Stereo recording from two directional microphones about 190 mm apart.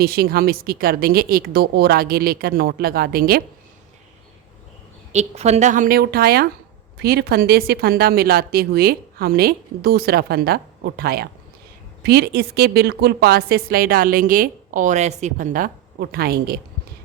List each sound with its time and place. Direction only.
0.0 s a woman's voice: 55° right (ahead or behind)
5.1 s a woman's voice: 35° right (ahead or behind); by 16.6 s 50° right (ahead or behind)